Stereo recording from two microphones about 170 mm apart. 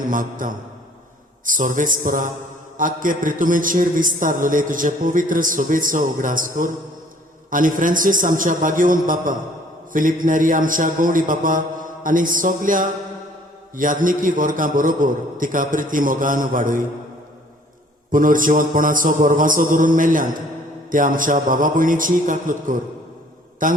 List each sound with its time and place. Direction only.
0.0 s a man's voice: 50° right (ahead or behind)
18.1 s a man's voice: 50° right (ahead or behind)